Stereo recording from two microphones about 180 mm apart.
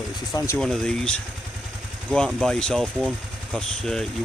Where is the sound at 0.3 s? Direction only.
15° left (ahead or behind).